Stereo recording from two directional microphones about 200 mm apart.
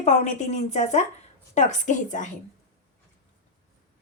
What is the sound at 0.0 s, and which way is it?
Speech, 35° left (ahead or behind).